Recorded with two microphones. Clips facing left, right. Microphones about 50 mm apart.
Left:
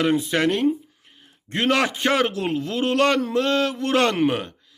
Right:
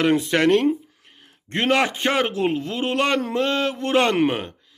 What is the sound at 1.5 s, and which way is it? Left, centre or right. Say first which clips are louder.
A man's voice: right 1 dB; right.